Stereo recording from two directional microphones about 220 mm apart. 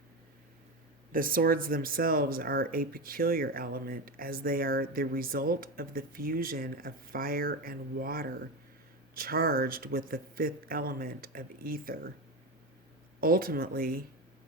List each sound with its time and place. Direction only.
1.1 s speech: 40° right (ahead or behind)
13.1 s speech: 40° right (ahead or behind)